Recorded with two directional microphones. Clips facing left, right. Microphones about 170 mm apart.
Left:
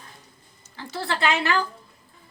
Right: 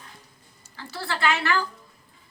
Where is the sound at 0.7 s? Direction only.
20° left (ahead or behind).